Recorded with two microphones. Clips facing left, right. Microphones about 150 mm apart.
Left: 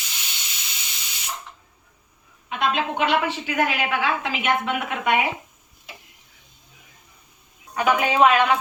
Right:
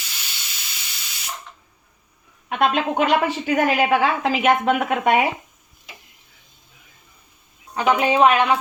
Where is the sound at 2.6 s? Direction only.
45° right (ahead or behind).